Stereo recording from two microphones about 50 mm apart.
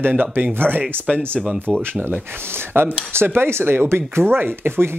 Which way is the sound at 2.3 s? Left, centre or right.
Right.